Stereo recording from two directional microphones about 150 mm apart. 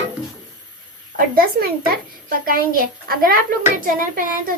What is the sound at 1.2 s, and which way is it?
A child's voice, 80° right.